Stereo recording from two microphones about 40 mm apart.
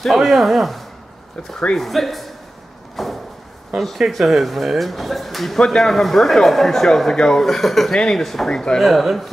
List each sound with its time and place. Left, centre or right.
0.1 s speech: centre
3.0 s a sound: centre
4.1 s speech: centre
7.9 s speech: centre
8.2 s speech: centre
8.5 s speech: centre
8.7 s speech: centre